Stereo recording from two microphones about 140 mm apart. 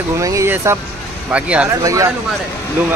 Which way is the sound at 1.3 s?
10° right (ahead or behind).